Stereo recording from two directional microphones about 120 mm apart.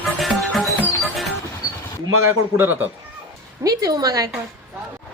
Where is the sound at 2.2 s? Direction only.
20° right (ahead or behind).